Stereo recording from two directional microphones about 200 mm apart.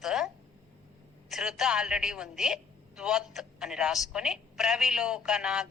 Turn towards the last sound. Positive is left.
turn(degrees=-5)  # may be behind; listen again after turning